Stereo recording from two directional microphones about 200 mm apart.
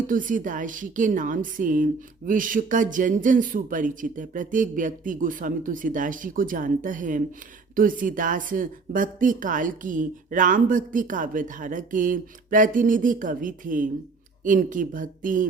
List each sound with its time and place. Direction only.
0.1 s a woman's voice: 40° right (ahead or behind)